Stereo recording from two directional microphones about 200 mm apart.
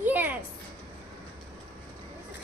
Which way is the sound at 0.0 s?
10° right (ahead or behind).